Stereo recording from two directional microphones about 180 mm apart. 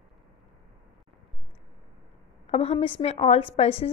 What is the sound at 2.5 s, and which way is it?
A woman's voice, 35° left (ahead or behind).